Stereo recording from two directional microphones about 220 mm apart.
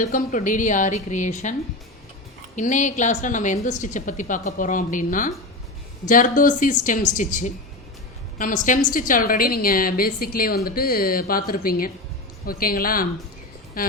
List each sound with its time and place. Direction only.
0.0 s a woman's voice: 35° left (ahead or behind)
2.6 s a woman's voice: 35° left (ahead or behind)